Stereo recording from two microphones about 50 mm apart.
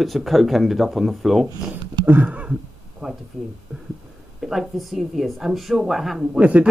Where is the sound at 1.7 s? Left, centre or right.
Right.